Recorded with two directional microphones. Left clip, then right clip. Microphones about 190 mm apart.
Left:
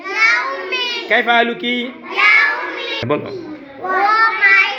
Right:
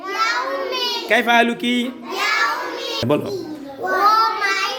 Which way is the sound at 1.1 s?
20° right (ahead or behind).